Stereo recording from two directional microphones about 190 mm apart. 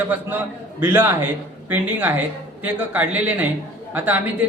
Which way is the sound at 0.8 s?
10° right (ahead or behind).